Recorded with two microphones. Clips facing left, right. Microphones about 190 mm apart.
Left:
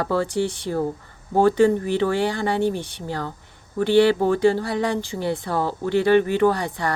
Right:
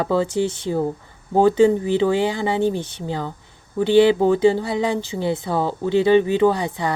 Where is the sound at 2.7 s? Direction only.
15° left (ahead or behind).